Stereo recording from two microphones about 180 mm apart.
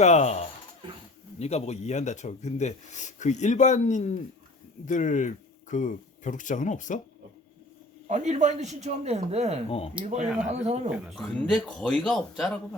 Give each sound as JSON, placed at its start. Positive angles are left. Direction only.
{"t": 0.0, "sound": "speech", "side_deg": 40}
{"t": 8.0, "sound": "a man's voice", "side_deg": -40}
{"t": 9.6, "sound": "speech", "side_deg": 30}
{"t": 10.0, "sound": "a man's voice", "side_deg": -40}
{"t": 11.0, "sound": "speech", "side_deg": 0}